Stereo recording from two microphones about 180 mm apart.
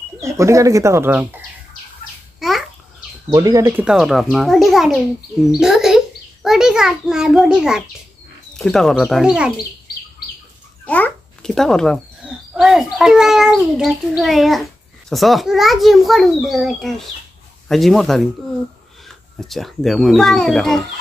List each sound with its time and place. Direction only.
0.2 s speech: 15° right (ahead or behind)
2.4 s babbling: centre (ahead or behind)
3.3 s speech: 20° right (ahead or behind)
3.8 s a child's voice: centre (ahead or behind)
5.6 s a sound: 5° right (ahead or behind)
8.5 s a child's voice: centre (ahead or behind)
10.9 s a child's voice: 10° left (ahead or behind)